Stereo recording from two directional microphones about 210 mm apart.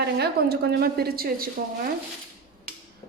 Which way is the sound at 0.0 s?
50° right (ahead or behind).